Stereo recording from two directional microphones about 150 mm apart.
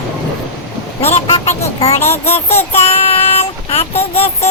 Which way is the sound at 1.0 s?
45° left (ahead or behind).